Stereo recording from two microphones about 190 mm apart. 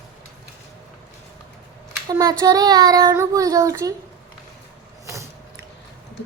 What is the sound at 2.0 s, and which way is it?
Child singing, 20° right (ahead or behind).